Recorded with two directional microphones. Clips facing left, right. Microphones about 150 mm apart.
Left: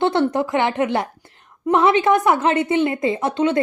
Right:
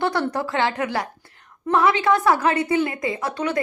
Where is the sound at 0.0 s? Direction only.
20° left (ahead or behind).